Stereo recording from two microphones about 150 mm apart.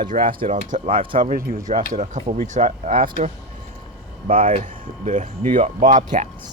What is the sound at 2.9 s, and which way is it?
Speech, 65° right (ahead or behind).